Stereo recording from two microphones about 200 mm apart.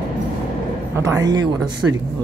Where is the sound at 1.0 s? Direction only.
15° right (ahead or behind).